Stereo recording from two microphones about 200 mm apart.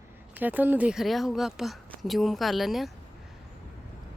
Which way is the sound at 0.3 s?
10° right (ahead or behind).